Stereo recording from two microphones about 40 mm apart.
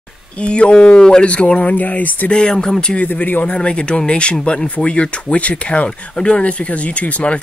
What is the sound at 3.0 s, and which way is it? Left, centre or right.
Speech, left.